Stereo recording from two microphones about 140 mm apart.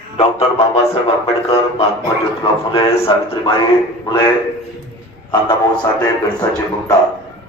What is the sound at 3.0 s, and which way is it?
Speech, 40° left (ahead or behind).